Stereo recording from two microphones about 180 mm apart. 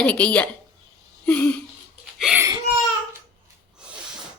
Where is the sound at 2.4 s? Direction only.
20° right (ahead or behind).